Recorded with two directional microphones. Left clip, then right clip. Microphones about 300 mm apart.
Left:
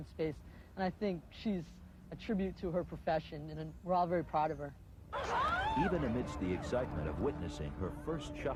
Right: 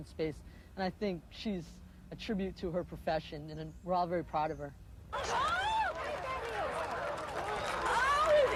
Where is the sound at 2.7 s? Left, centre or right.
Centre.